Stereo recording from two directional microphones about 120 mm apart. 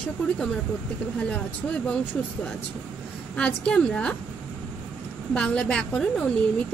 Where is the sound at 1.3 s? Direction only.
10° left (ahead or behind).